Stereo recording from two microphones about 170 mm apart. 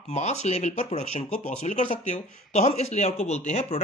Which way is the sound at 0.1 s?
40° left (ahead or behind).